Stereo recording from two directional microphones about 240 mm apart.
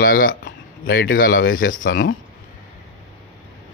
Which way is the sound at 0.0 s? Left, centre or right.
Left.